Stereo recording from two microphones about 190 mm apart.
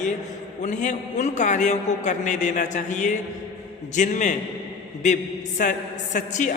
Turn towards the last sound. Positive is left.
turn(degrees=40)  # may be behind; listen again after turning